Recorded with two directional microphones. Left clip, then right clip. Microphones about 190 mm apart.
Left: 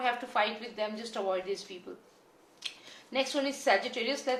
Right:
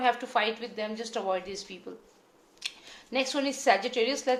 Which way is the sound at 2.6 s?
40° right (ahead or behind).